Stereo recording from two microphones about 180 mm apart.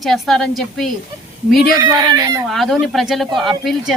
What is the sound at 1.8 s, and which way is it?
Speech, 20° right (ahead or behind).